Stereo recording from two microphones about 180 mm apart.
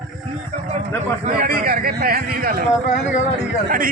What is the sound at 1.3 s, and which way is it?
A man's voice, 55° right (ahead or behind).